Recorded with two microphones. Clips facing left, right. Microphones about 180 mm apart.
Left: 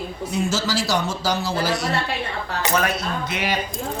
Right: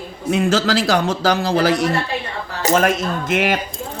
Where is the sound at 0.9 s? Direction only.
55° right (ahead or behind).